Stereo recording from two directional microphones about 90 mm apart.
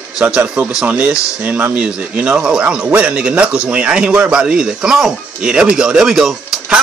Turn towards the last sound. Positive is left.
turn(degrees=-5)  # may be behind; listen again after turning